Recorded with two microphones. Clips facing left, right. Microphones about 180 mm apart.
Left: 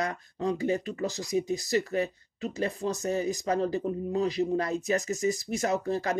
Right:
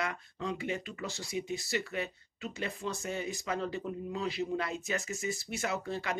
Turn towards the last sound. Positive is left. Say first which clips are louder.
# left 7 dB
turn(degrees=40)  # may be behind; listen again after turning